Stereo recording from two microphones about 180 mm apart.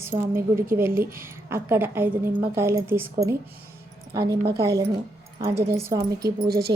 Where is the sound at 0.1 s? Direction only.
30° right (ahead or behind).